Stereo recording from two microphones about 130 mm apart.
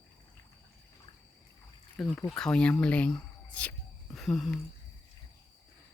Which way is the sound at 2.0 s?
5° left (ahead or behind).